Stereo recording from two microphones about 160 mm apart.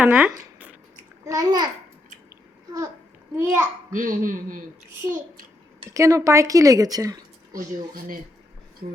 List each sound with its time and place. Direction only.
0.0 s a child's voice: 10° right (ahead or behind)
1.2 s a child's voice: 20° right (ahead or behind)
3.3 s a child's voice: 15° right (ahead or behind)
3.9 s speech: 55° right (ahead or behind)
5.9 s a woman's voice: 20° right (ahead or behind)